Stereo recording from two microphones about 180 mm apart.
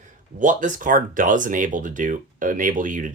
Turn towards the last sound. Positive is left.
turn(degrees=-45)  # may be behind; listen again after turning